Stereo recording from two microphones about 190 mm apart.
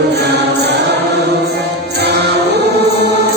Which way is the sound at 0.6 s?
60° right (ahead or behind).